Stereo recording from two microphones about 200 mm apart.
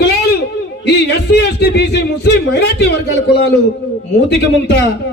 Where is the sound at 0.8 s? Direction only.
60° left (ahead or behind).